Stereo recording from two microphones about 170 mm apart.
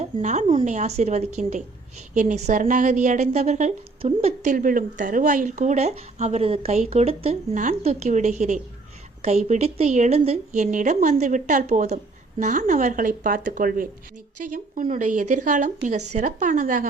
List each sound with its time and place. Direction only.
0.0 s a woman's voice: 45° right (ahead or behind)
4.5 s speech: 55° right (ahead or behind); by 7.3 s 35° right (ahead or behind)
7.5 s a woman's voice: 45° right (ahead or behind)